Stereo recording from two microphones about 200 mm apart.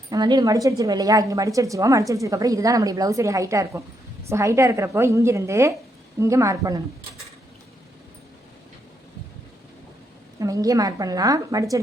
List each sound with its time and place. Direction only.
0.1 s a woman's voice: 20° right (ahead or behind)
10.4 s a woman's voice: 15° right (ahead or behind)